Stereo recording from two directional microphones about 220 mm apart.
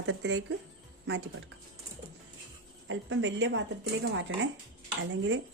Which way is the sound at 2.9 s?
60° right (ahead or behind).